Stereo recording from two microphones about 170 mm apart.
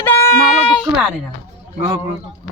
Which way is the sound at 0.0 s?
10° left (ahead or behind).